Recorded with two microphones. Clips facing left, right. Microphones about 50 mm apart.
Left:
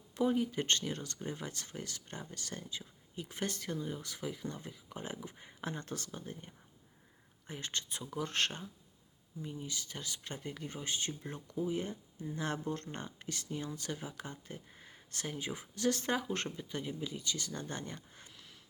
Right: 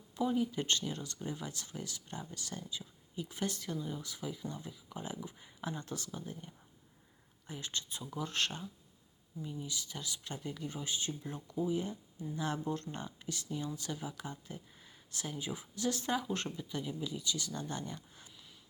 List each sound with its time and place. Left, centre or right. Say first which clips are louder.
0.2 s speech: left 1 dB; left